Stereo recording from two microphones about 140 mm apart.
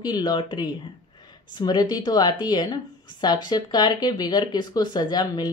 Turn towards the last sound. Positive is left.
turn(degrees=30)  # may be behind; listen again after turning